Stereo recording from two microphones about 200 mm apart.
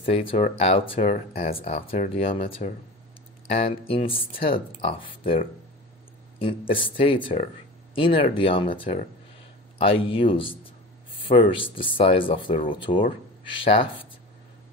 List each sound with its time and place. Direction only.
0.0 s speech: 30° left (ahead or behind)
1.3 s speech: 45° left (ahead or behind)
1.9 s speech: 30° left (ahead or behind)
3.4 s speech: 30° left (ahead or behind)
6.7 s speech: 25° left (ahead or behind)
11.1 s a sound: 25° left (ahead or behind)
11.5 s speech: 25° left (ahead or behind)